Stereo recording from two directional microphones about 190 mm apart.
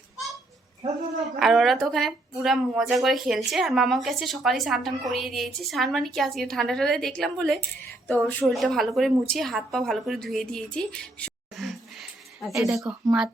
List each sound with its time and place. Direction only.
1.4 s a woman's voice: centre (ahead or behind)